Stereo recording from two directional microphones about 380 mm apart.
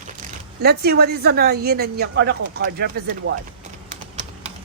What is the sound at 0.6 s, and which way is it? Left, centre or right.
A woman's voice, right.